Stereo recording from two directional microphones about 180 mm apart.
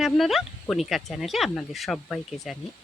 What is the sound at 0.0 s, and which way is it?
Speech, centre (ahead or behind).